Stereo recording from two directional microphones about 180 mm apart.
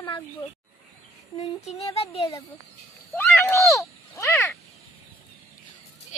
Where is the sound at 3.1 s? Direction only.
10° left (ahead or behind).